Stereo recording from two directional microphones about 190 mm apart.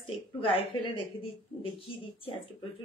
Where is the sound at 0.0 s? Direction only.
30° left (ahead or behind).